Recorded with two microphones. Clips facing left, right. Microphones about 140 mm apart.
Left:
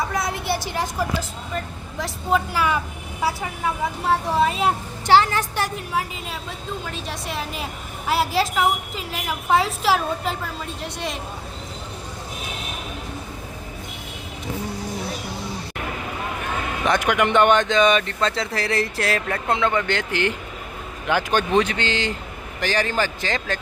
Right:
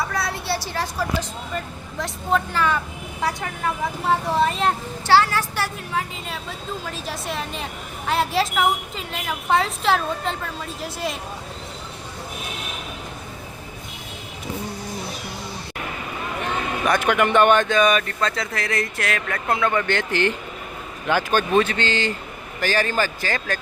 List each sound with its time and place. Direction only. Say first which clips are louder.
0.1 s vehicle: left 1 dB; 20° left (ahead or behind)
1.5 s a woman's voice: left 1 dB; 5° left (ahead or behind)
5.0 s speech: left 1 dB; 20° left (ahead or behind)
6.8 s a woman's voice: right 1 dB; centre (ahead or behind)
16.8 s speech: even; 20° left (ahead or behind)